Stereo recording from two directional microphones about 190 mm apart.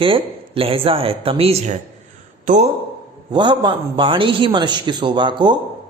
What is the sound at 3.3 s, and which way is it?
A man's voice, 25° right (ahead or behind).